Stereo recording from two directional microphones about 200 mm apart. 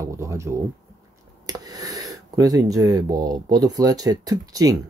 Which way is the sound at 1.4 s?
20° right (ahead or behind).